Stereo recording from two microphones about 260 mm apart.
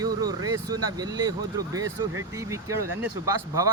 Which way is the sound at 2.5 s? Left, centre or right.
Centre.